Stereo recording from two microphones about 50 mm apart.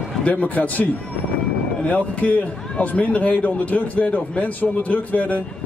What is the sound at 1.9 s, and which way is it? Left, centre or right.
A man's voice, left.